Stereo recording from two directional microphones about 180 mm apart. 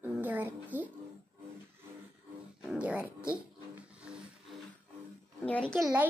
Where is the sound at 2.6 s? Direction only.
5° right (ahead or behind).